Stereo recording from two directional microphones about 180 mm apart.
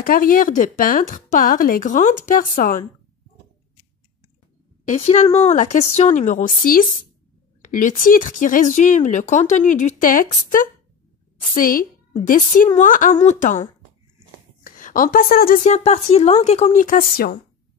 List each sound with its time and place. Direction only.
0.0 s speech: 50° left (ahead or behind)
4.8 s speech: 40° left (ahead or behind)